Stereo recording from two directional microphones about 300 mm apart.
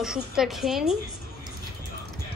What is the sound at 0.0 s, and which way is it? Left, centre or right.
Speech, centre.